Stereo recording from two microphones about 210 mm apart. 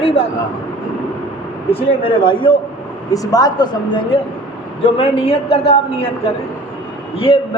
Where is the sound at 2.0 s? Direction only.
25° left (ahead or behind).